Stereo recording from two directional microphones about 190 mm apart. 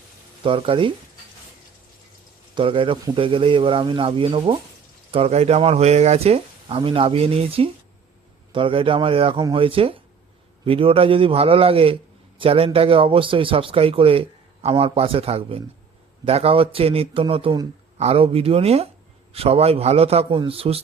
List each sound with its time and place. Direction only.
0.4 s speech: 30° right (ahead or behind)
2.6 s speech: 25° right (ahead or behind)